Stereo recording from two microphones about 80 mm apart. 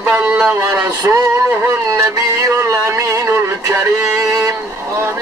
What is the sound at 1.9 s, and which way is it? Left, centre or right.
Music, right.